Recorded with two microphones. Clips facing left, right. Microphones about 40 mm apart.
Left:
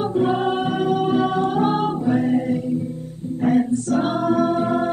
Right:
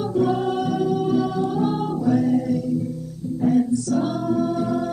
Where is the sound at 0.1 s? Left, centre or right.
Left.